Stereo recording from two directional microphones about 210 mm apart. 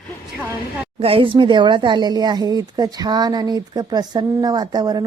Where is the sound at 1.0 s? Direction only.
25° right (ahead or behind).